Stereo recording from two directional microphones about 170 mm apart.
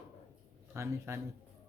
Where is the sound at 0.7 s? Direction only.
15° right (ahead or behind).